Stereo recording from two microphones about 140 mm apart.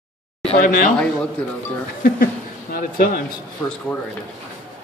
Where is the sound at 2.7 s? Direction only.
85° left.